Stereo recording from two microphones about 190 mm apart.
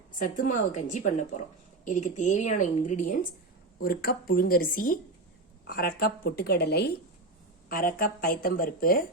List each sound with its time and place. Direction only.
0.2 s a woman's voice: 40° left (ahead or behind)
3.8 s a woman's voice: 55° left (ahead or behind)